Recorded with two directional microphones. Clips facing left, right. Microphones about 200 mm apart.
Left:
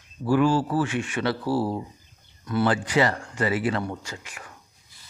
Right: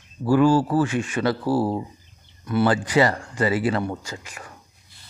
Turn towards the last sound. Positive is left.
turn(degrees=-35)  # may be behind; listen again after turning